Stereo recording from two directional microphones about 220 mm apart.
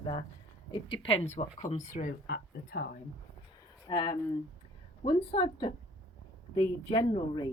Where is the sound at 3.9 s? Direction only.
20° left (ahead or behind).